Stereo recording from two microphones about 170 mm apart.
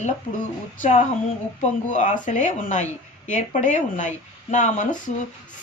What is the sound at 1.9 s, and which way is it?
Speech, 45° left (ahead or behind).